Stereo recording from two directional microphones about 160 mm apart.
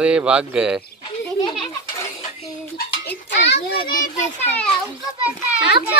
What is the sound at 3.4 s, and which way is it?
Speech, 80° left.